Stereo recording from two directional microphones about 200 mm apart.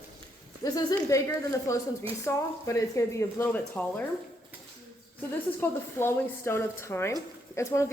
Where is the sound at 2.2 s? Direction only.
15° left (ahead or behind).